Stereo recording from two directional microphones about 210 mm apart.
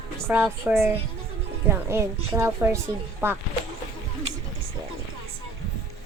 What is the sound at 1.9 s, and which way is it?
A woman's voice, 10° right (ahead or behind).